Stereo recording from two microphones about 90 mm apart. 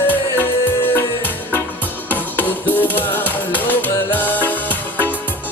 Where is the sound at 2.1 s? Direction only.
20° left (ahead or behind).